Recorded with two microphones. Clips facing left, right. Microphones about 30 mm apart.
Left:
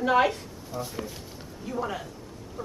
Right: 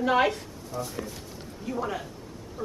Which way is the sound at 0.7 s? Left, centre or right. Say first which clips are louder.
Even; centre.